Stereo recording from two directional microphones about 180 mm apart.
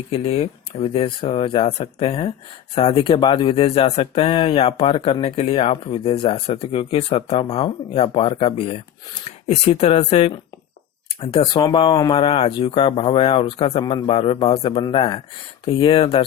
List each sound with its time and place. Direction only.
0.1 s speech: 30° left (ahead or behind)